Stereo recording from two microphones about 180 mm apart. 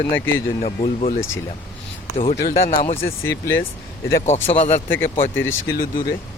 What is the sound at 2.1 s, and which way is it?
Speech, 35° left (ahead or behind).